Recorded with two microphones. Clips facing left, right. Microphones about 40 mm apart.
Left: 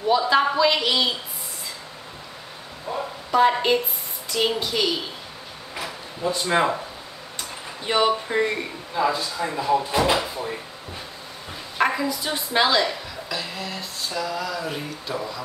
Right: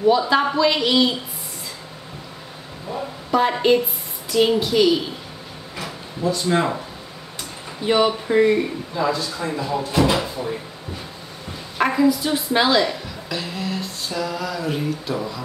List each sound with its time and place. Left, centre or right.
0.0 s speech: centre
2.9 s a sound: centre
3.3 s speech: centre
6.2 s speech: left
7.8 s speech: centre
9.1 s speech: centre
11.8 s a woman's voice: centre